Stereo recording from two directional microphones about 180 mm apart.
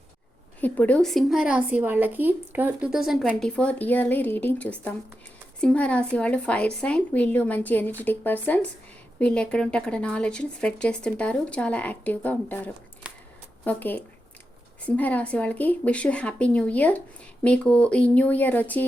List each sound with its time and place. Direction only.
0.6 s a woman's voice: 10° left (ahead or behind)